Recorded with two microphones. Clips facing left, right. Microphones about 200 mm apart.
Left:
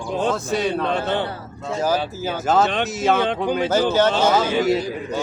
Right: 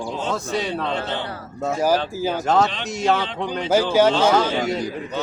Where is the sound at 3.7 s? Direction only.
10° right (ahead or behind).